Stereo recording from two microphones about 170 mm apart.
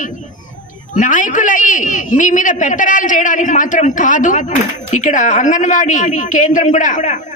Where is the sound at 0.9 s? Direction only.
50° left (ahead or behind).